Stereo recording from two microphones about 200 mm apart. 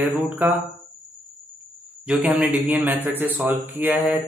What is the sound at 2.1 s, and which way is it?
A man's voice, 5° right (ahead or behind).